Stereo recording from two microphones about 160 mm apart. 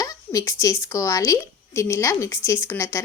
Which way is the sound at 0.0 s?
20° left (ahead or behind).